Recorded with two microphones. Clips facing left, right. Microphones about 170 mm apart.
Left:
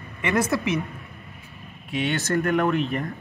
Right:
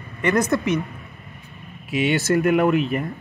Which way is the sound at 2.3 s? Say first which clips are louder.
Right 4 dB; 15° right (ahead or behind).